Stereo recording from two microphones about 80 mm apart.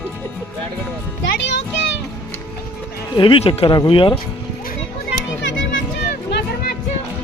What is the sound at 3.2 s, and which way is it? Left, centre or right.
Speech, left.